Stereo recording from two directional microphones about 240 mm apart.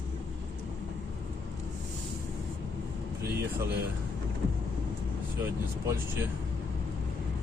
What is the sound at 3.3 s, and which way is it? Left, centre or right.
Speech, right.